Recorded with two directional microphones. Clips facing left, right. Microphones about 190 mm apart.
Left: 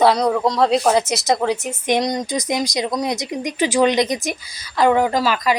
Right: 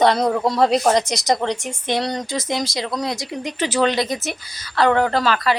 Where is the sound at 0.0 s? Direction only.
Centre (ahead or behind).